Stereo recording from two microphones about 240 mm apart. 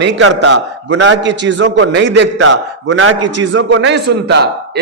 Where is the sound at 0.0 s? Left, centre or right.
Right.